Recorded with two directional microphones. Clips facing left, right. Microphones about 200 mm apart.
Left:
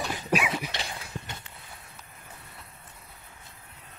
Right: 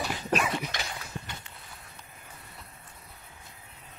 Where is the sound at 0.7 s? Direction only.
30° left (ahead or behind).